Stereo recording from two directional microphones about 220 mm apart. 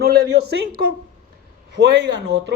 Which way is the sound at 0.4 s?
45° right (ahead or behind).